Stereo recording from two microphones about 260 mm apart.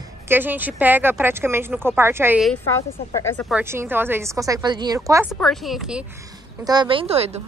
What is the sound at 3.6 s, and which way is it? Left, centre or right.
Speech, centre.